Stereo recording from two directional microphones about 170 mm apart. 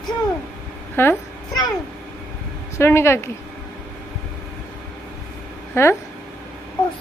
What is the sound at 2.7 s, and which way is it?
Speech, 15° left (ahead or behind).